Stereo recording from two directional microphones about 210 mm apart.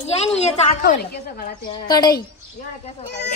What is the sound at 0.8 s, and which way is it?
Speech, 45° left (ahead or behind).